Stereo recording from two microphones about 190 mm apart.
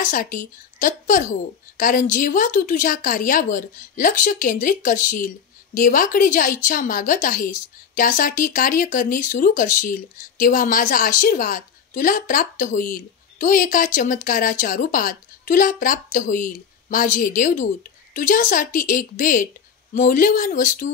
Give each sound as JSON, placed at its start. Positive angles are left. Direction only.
{"t": 0.0, "sound": "a woman's voice", "side_deg": 45}